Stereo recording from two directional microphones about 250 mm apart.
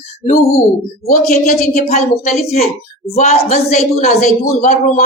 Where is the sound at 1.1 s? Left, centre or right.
Left.